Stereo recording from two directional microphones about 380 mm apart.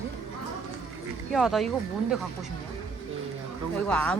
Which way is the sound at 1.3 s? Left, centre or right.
Centre.